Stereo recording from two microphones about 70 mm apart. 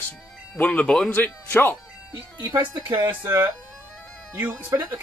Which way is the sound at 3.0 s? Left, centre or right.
Right.